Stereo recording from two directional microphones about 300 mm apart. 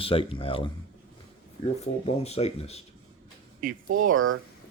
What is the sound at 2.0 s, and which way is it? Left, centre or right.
Speech, left.